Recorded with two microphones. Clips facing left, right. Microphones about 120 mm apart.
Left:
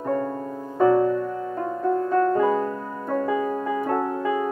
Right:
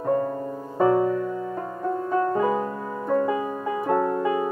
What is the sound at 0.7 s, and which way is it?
Music, 15° right (ahead or behind).